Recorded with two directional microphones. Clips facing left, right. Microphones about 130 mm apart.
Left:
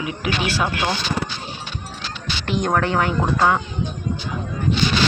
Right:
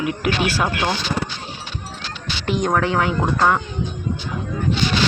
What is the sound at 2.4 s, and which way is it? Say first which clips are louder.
Speech: right 1 dB; 5° right (ahead or behind).